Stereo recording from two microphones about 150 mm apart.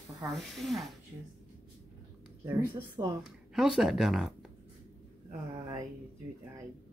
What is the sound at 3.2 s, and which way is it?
Speech, 5° right (ahead or behind).